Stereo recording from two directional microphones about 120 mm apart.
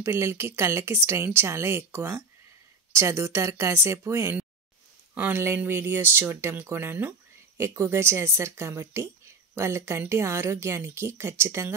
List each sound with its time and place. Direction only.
0.0 s speech: 20° right (ahead or behind)